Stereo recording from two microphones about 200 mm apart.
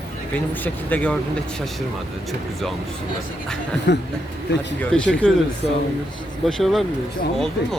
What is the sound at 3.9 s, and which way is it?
Speech, 60° left (ahead or behind).